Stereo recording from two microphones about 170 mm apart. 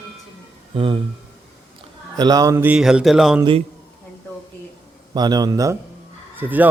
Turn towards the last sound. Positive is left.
turn(degrees=-10)  # may be behind; listen again after turning